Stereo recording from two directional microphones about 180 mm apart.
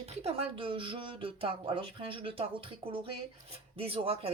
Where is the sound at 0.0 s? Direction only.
35° right (ahead or behind).